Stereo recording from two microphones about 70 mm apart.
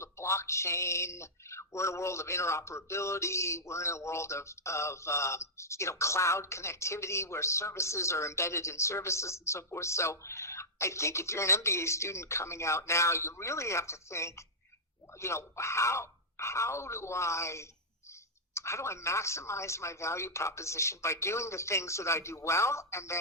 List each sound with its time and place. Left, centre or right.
0.0 s speech: left